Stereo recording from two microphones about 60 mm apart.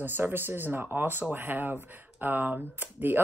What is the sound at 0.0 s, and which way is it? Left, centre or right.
Speech, right.